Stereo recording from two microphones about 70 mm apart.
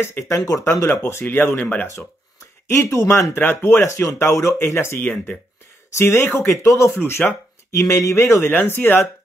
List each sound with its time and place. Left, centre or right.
0.0 s speech: left
2.7 s speech: left
3.3 s speech: left
5.0 s speech: centre
5.9 s speech: left